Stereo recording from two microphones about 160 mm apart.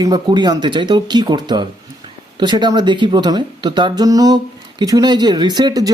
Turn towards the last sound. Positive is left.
turn(degrees=-25)  # may be behind; listen again after turning